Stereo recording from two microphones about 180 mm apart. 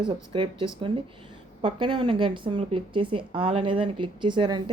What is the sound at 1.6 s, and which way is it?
Speech, 25° right (ahead or behind).